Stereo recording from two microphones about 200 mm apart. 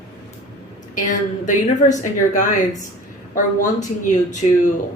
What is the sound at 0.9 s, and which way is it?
Speech, 40° left (ahead or behind).